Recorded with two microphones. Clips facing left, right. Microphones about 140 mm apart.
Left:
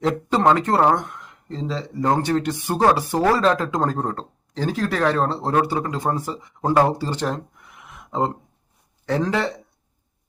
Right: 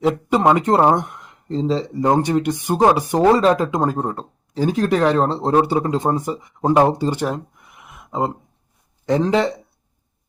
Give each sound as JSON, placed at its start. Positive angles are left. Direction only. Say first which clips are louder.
{"t": 0.0, "sound": "speech", "louder": "right 2 dB", "side_deg": -10}
{"t": 1.5, "sound": "speech", "louder": "right 8 dB", "side_deg": -30}
{"t": 2.0, "sound": "speech", "louder": "right 2 dB", "side_deg": -20}
{"t": 7.9, "sound": "a sound", "louder": "right 1 dB", "side_deg": -10}
{"t": 9.0, "sound": "speech", "louder": "right 5 dB", "side_deg": -20}